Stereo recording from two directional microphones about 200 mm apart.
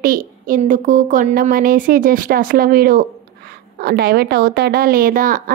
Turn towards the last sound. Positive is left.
turn(degrees=-45)  # may be behind; listen again after turning